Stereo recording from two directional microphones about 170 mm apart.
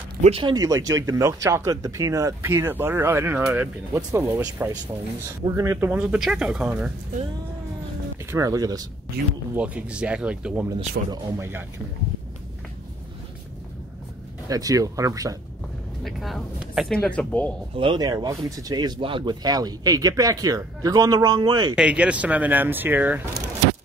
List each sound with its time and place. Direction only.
0.2 s speech: 30° right (ahead or behind); by 6.9 s 5° right (ahead or behind)
8.3 s speech: 20° right (ahead or behind)
9.2 s speech: 70° right (ahead or behind)
9.6 s speech: 5° right (ahead or behind)
14.5 s speech: 20° right (ahead or behind)
16.0 s speech: centre (ahead or behind)
17.7 s speech: 25° right (ahead or behind)
21.7 s speech: 5° right (ahead or behind)